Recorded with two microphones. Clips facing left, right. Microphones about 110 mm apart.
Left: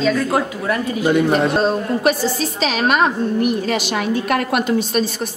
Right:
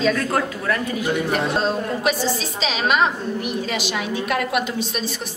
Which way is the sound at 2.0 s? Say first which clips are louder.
Left 4 dB; 50° left (ahead or behind).